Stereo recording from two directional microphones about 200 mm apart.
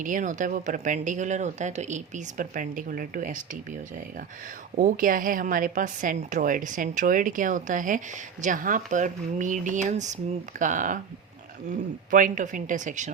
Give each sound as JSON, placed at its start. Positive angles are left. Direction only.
{"t": 0.0, "sound": "a woman's voice", "side_deg": -40}
{"t": 12.1, "sound": "a woman's voice", "side_deg": -40}